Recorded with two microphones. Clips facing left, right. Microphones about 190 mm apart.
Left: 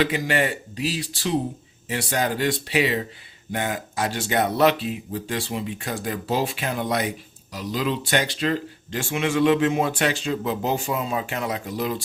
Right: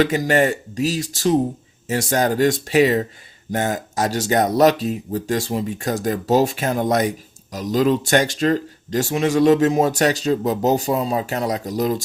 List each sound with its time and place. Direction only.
0.0 s speech: 45° right (ahead or behind)